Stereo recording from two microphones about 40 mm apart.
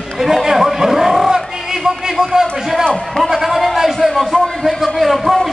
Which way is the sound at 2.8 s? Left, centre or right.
Centre.